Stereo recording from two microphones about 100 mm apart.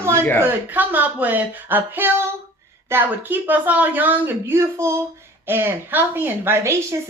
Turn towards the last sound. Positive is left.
turn(degrees=-25)  # may be behind; listen again after turning